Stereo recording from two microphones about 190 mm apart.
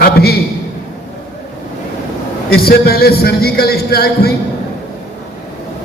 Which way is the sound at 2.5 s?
55° left (ahead or behind).